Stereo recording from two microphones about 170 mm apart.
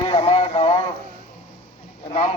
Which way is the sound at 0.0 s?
35° left (ahead or behind).